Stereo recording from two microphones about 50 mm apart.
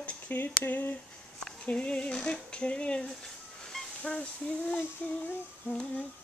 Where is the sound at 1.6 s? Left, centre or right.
Left.